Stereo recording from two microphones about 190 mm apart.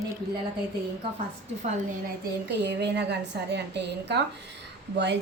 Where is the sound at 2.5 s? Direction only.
65° right (ahead or behind).